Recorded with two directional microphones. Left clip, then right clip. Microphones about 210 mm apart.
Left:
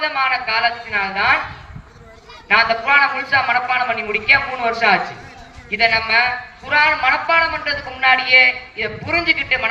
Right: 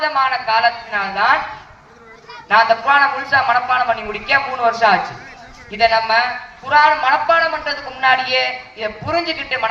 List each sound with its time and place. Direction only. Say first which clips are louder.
0.0 s a man's voice: right 2 dB; 25° right (ahead or behind)
2.5 s a man's voice: right 2 dB; 25° right (ahead or behind)